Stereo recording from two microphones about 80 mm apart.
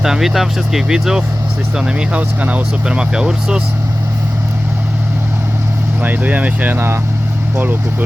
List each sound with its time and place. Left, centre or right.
0.0 s speech: centre
6.0 s speech: right